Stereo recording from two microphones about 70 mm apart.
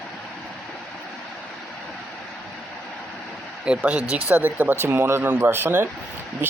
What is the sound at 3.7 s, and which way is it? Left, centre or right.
Speech, centre.